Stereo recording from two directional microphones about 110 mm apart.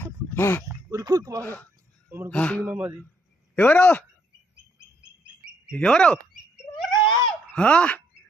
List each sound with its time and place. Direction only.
0.3 s speech: 20° left (ahead or behind)
0.6 s speech: 30° right (ahead or behind)
2.3 s speech: 10° left (ahead or behind)
2.6 s speech: 15° right (ahead or behind)
3.5 s speech: 15° left (ahead or behind)
5.7 s speech: 10° left (ahead or behind)
6.9 s a sound: 45° left (ahead or behind)
7.5 s speech: 10° left (ahead or behind)